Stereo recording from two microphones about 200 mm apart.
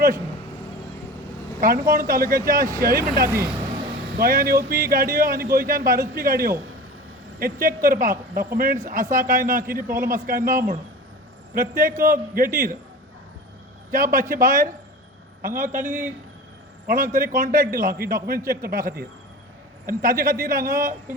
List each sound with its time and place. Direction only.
1.6 s speech: 45° right (ahead or behind)
3.3 s a man's voice: 5° right (ahead or behind)
4.2 s speech: 50° right (ahead or behind)
13.9 s speech: 45° right (ahead or behind)
15.8 s a man's voice: 10° right (ahead or behind)
16.8 s speech: 45° right (ahead or behind)